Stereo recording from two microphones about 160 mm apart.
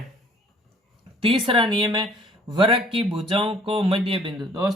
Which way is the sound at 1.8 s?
30° right (ahead or behind).